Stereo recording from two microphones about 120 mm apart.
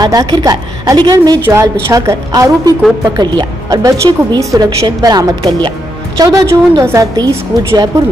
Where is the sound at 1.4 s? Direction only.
20° right (ahead or behind).